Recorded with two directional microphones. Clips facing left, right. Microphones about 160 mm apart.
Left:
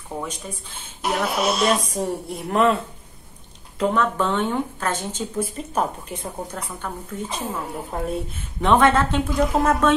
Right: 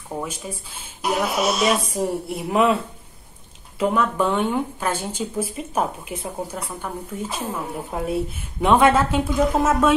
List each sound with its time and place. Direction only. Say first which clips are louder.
0.2 s speech: right 1 dB; 10° right (ahead or behind)